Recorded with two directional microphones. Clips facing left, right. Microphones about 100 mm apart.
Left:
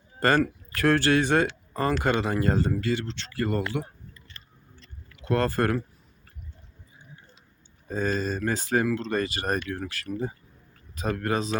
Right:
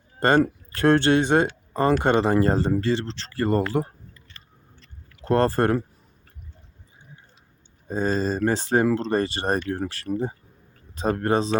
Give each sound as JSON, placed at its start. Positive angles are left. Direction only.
{"t": 0.2, "sound": "speech", "side_deg": -25}
{"t": 5.2, "sound": "speech", "side_deg": -35}
{"t": 7.9, "sound": "speech", "side_deg": -30}